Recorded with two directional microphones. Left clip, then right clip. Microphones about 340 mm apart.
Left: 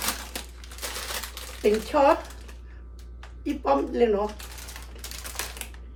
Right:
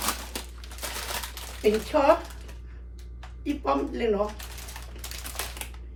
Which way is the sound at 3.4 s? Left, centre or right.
Centre.